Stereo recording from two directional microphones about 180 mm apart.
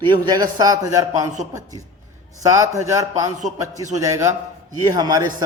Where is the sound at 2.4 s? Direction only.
20° right (ahead or behind).